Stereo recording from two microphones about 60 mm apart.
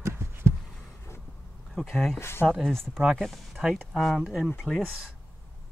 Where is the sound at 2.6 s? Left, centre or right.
Centre.